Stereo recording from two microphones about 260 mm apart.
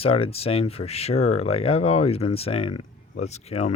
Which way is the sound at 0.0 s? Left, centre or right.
Left.